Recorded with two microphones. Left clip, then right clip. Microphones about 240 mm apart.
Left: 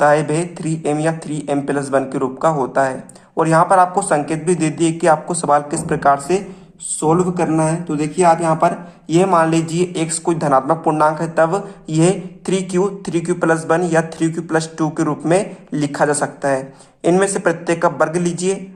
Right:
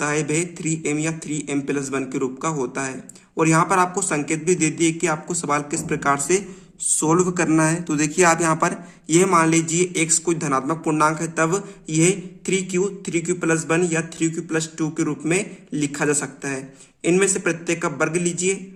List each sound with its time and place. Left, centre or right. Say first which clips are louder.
0.0 s a man's voice: left 9 dB; centre
7.0 s speech: left 4 dB; right
9.1 s a man's voice: left 3 dB; right